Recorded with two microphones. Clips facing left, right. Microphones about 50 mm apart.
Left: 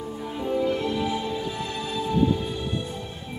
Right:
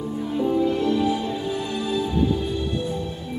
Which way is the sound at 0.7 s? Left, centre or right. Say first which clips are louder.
Right 4 dB; centre.